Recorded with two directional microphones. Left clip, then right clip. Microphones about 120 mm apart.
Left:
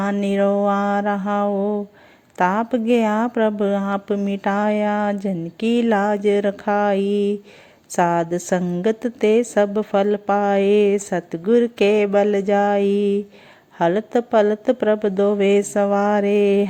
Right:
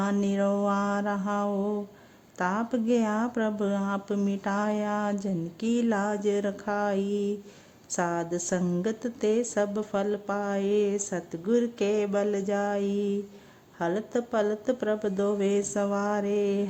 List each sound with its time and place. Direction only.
0.0 s speech: 20° left (ahead or behind)
5.9 s a sound: 40° left (ahead or behind)
6.1 s speech: 15° left (ahead or behind)